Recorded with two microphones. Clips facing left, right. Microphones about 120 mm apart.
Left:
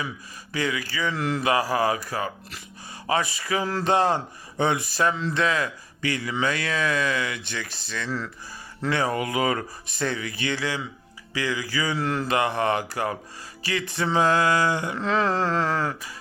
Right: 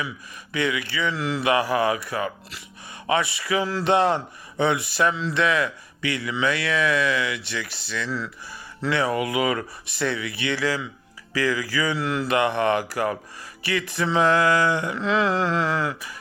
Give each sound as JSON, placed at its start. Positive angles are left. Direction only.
{"t": 0.5, "sound": "speech", "side_deg": 35}
{"t": 1.5, "sound": "speech", "side_deg": 35}